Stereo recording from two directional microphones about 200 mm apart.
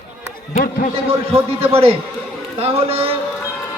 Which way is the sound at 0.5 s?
40° left (ahead or behind).